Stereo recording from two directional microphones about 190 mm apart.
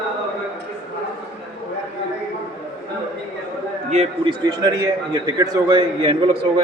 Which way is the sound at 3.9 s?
35° right (ahead or behind).